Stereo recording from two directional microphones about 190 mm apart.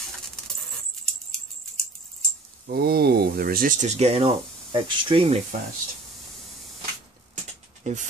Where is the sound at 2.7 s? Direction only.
55° right (ahead or behind); by 5.4 s 30° right (ahead or behind).